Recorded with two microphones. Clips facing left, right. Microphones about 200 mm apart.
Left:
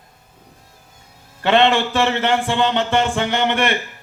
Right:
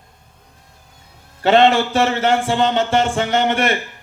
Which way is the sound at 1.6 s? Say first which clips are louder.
Right 2 dB; 40° right (ahead or behind).